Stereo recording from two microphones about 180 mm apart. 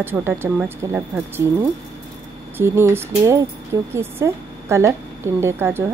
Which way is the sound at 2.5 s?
15° right (ahead or behind).